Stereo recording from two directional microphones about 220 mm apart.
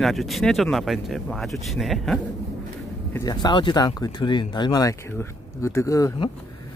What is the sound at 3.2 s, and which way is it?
Speech, 20° left (ahead or behind).